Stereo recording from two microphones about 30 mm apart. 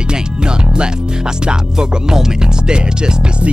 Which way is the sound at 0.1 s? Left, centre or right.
Right.